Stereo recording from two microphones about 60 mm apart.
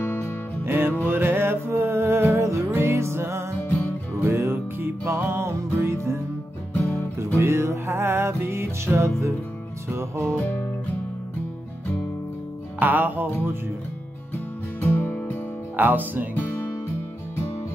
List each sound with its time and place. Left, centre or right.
0.7 s music: right
6.8 s music: left
7.3 s music: right
12.7 s music: right
14.8 s music: left
15.7 s speech: right
16.3 s music: left